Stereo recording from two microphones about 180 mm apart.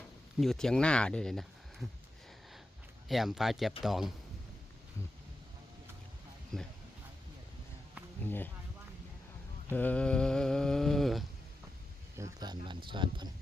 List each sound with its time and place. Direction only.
0.3 s speech: centre (ahead or behind)
3.1 s speech: centre (ahead or behind)
6.5 s speech: centre (ahead or behind)
9.6 s mantra: 10° left (ahead or behind)
12.1 s speech: 20° right (ahead or behind)